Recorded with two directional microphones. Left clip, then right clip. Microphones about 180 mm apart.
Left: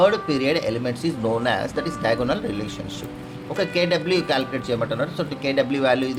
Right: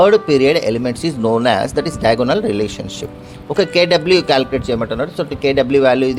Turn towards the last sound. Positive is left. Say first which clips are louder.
# right 8 dB
turn(degrees=-50)  # may be behind; listen again after turning